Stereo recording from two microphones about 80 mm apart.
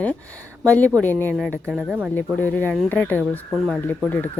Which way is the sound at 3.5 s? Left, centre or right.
Centre.